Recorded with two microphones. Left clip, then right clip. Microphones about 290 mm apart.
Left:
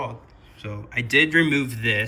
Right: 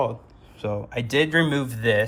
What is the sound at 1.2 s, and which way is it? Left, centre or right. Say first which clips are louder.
Speech: left 2 dB; right.